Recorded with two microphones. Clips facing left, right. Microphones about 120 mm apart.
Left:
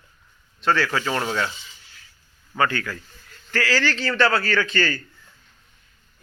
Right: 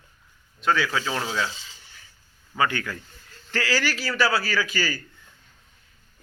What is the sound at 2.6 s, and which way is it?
A man's voice, 20° right (ahead or behind).